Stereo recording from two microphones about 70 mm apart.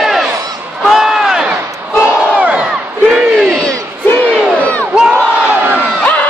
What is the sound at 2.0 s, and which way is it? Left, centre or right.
Battle cry, centre.